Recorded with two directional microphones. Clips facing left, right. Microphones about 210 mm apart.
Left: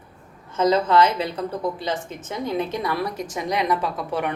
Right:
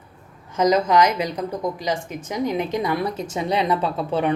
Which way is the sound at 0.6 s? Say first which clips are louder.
Right 1 dB; 15° right (ahead or behind).